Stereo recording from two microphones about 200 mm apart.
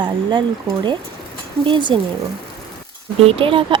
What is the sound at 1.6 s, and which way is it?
Speech, 25° right (ahead or behind).